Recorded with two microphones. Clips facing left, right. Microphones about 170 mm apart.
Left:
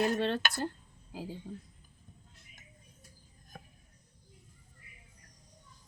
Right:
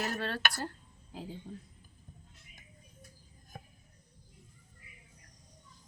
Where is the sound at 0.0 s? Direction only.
20° left (ahead or behind).